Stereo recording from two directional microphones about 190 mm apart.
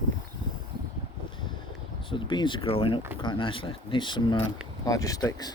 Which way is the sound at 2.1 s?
25° left (ahead or behind).